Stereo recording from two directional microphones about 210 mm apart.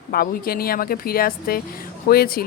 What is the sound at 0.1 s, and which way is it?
Speech, 45° left (ahead or behind).